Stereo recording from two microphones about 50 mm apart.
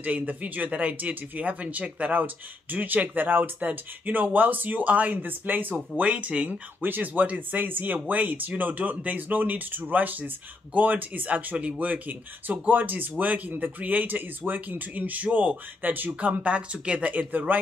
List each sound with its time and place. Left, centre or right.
0.0 s speech: right
16.2 s speech: right
17.3 s speech: right